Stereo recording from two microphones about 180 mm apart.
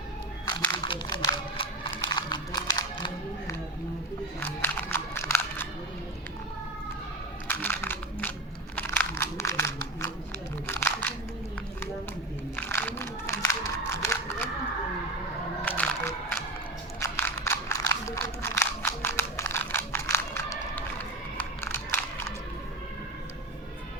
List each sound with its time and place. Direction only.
0.9 s crumpling: 25° left (ahead or behind)
4.4 s music: 10° left (ahead or behind)
7.4 s a sound: 10° left (ahead or behind)
10.7 s crumpling: 15° left (ahead or behind)
12.5 s music: 10° left (ahead or behind)
13.5 s a sound: 15° left (ahead or behind)
15.6 s music: 10° left (ahead or behind)
17.0 s crumpling: 15° left (ahead or behind)
21.3 s crunch: 10° left (ahead or behind)